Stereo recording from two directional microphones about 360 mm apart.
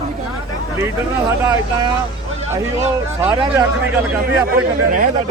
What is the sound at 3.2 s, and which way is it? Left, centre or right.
Speech, centre.